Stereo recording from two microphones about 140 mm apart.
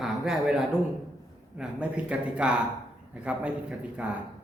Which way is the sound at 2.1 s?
5° right (ahead or behind).